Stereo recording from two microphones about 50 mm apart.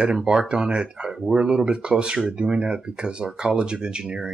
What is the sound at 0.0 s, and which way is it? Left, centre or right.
Speech, centre.